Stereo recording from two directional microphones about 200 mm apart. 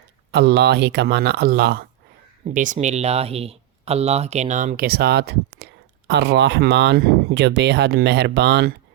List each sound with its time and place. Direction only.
0.3 s speech: 55° right (ahead or behind)
2.5 s speech: 40° right (ahead or behind); by 8.7 s 55° right (ahead or behind)